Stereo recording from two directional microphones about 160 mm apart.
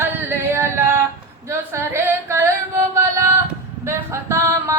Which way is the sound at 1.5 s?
15° right (ahead or behind).